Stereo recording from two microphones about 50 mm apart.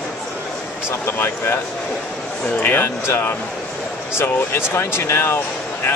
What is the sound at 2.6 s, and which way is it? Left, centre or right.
Speech, left.